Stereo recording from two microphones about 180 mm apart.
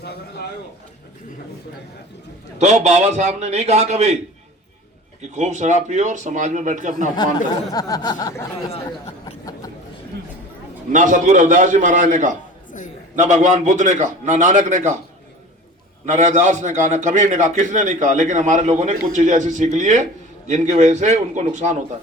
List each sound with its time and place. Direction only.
0.0 s a sound: 65° left (ahead or behind)
2.6 s a man's voice: 40° right (ahead or behind)
5.3 s a man's voice: 40° right (ahead or behind)
7.2 s speech: 20° left (ahead or behind)
10.9 s a man's voice: 45° right (ahead or behind)
16.0 s a man's voice: 45° right (ahead or behind)